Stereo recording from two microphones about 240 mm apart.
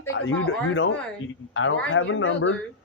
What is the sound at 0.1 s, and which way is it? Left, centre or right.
Speech, left.